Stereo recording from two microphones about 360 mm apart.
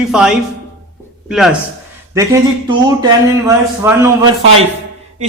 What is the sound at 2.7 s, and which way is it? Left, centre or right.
Speech, centre.